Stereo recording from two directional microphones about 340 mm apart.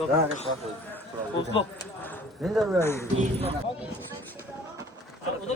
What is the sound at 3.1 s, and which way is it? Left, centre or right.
Speech, centre.